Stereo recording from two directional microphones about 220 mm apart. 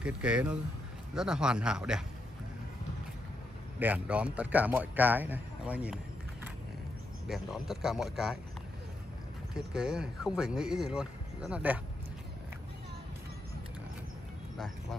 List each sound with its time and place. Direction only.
0.0 s speech: 5° right (ahead or behind)
3.8 s a man's voice: 5° right (ahead or behind)
7.2 s speech: centre (ahead or behind)
9.5 s speech: 5° right (ahead or behind)